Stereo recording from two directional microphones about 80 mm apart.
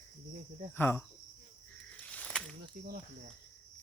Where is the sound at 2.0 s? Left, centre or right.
Centre.